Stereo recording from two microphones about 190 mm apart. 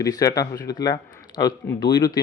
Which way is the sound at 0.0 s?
15° left (ahead or behind).